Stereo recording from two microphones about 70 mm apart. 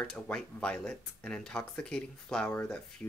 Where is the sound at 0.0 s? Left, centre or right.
Centre.